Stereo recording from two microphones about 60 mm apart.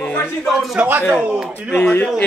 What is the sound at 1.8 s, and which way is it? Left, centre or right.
Speech, left.